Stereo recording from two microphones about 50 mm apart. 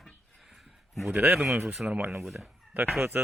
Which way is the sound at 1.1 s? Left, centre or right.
Right.